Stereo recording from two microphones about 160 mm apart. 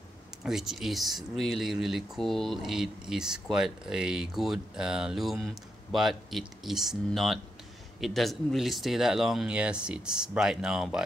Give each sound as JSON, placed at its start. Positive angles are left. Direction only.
{"t": 0.4, "sound": "speech", "side_deg": 0}